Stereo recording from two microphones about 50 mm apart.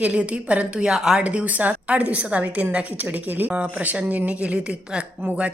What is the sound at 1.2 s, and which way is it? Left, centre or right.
A woman's voice, right.